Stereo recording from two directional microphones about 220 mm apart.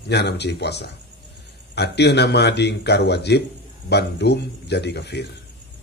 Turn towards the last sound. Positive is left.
turn(degrees=50)  # may be behind; listen again after turning